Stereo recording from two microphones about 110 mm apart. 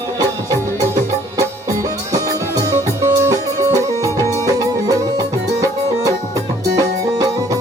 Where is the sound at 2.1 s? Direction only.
30° right (ahead or behind).